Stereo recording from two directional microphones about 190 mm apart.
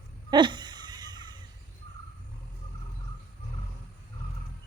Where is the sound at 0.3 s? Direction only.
25° right (ahead or behind).